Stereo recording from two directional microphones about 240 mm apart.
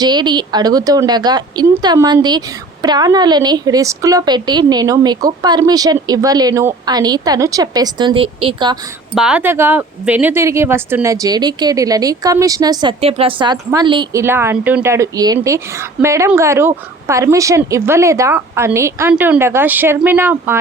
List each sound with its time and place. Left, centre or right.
0.0 s speech: centre
9.1 s speech: centre